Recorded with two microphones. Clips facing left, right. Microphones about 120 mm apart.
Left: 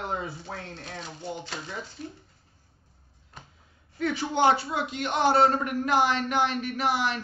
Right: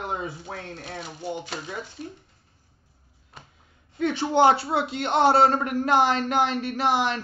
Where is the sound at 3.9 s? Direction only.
25° right (ahead or behind).